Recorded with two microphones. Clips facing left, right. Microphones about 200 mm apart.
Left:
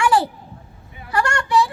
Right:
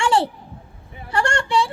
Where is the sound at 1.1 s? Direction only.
30° right (ahead or behind).